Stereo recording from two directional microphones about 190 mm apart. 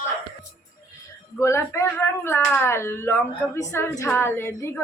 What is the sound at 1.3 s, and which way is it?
A woman's voice, 15° left (ahead or behind).